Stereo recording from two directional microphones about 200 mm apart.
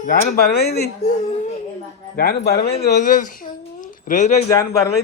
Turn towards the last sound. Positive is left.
turn(degrees=15)  # may be behind; listen again after turning